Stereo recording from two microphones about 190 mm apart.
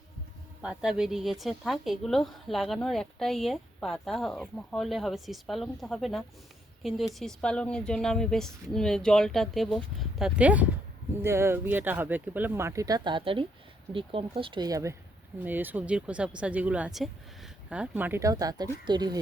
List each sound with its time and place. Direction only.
0.6 s speech: 5° right (ahead or behind); by 19.2 s 20° right (ahead or behind)